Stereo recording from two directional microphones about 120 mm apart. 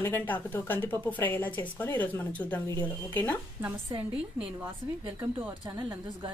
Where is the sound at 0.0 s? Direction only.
20° left (ahead or behind).